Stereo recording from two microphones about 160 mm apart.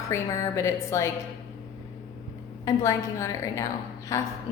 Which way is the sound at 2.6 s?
20° left (ahead or behind).